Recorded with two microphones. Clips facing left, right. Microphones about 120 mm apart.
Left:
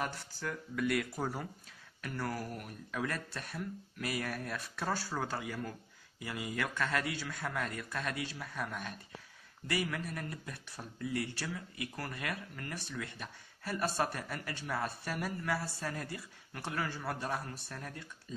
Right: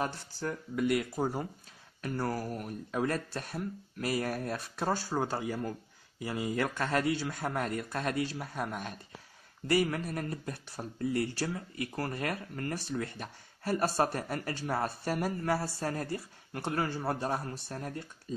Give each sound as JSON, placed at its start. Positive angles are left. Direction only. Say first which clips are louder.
{"t": 0.0, "sound": "speech", "louder": "right 4 dB", "side_deg": -30}